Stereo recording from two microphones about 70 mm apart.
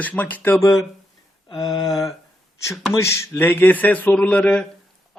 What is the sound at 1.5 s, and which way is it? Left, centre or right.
Speech, left.